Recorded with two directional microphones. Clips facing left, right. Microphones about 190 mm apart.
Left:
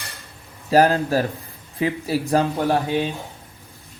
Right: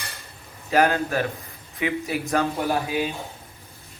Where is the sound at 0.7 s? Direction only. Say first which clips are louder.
Left 4 dB; 35° left (ahead or behind).